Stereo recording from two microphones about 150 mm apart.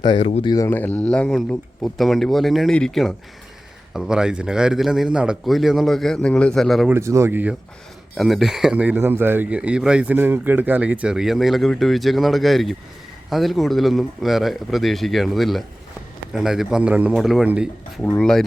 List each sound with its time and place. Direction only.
0.0 s speech: 30° left (ahead or behind); by 6.8 s centre (ahead or behind)
6.8 s speech: 20° right (ahead or behind)
8.1 s speech: centre (ahead or behind)
18.0 s speech: 5° left (ahead or behind)